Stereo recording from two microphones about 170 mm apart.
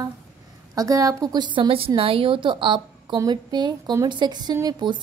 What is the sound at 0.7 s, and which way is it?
A woman's voice, 20° right (ahead or behind).